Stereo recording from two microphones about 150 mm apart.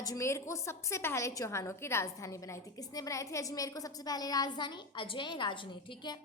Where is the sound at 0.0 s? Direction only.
20° left (ahead or behind).